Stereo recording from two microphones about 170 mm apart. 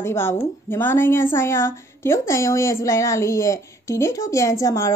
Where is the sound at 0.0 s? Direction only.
15° left (ahead or behind).